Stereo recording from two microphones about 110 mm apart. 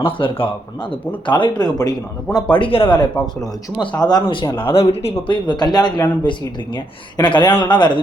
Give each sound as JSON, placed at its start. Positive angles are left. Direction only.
{"t": 0.0, "sound": "speech", "side_deg": 50}
{"t": 3.8, "sound": "speech", "side_deg": 40}
{"t": 4.5, "sound": "speech", "side_deg": 55}
{"t": 5.3, "sound": "speech", "side_deg": 40}